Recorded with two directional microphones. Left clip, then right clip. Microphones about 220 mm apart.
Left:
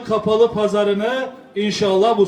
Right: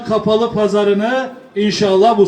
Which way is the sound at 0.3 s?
45° right (ahead or behind).